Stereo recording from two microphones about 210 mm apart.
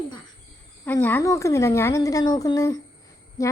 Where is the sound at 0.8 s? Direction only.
10° left (ahead or behind).